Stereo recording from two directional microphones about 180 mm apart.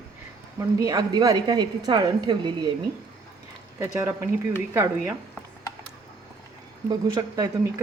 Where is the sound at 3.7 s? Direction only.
15° right (ahead or behind).